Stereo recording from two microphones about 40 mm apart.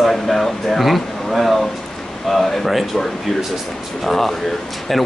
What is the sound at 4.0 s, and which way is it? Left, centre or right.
Speech, centre.